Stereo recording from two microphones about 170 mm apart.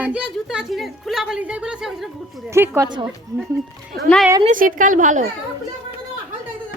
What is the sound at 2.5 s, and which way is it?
Speech, 15° right (ahead or behind).